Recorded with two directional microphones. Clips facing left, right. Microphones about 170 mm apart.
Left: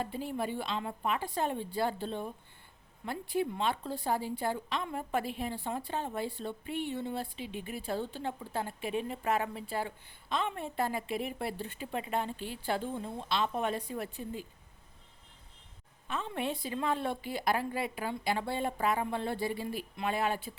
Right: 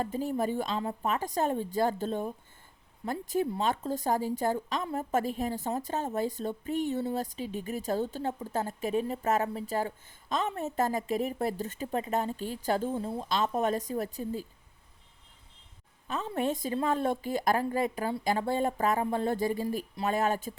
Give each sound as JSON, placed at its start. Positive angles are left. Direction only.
{"t": 0.0, "sound": "a woman's voice", "side_deg": -45}
{"t": 16.0, "sound": "a woman's voice", "side_deg": -40}